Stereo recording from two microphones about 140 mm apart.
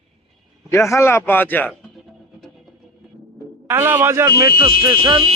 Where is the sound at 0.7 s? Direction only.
20° left (ahead or behind).